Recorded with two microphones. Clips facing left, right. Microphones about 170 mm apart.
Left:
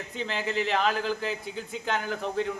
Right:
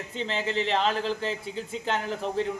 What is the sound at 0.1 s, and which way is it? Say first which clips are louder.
A man's voice: right 1 dB; 30° right (ahead or behind).